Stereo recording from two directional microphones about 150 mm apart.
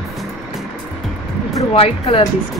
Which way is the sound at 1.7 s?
40° left (ahead or behind).